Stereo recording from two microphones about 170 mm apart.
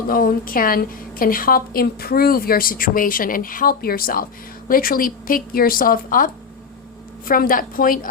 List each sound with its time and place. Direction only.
0.1 s a woman's voice: 55° left (ahead or behind)